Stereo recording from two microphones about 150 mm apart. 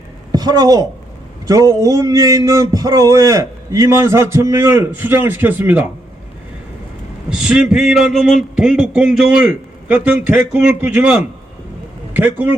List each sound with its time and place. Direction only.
0.3 s a woman's voice: 25° right (ahead or behind); by 5.9 s 10° right (ahead or behind)
7.3 s a man's voice: 5° right (ahead or behind)